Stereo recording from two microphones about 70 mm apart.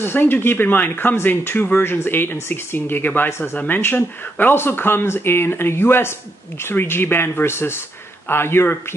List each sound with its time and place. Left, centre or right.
0.0 s speech: left